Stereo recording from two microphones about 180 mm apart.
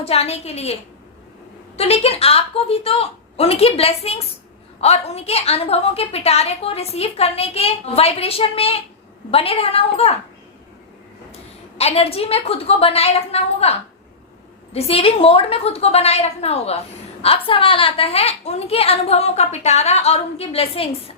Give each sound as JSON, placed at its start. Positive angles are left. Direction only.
{"t": 0.0, "sound": "a woman's voice", "side_deg": 35}
{"t": 11.8, "sound": "a woman's voice", "side_deg": 35}